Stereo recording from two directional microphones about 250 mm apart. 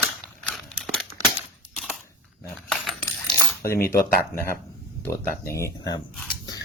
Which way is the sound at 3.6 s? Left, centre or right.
Left.